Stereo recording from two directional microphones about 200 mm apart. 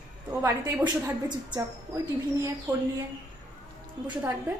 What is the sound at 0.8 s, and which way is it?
Speech, 20° right (ahead or behind).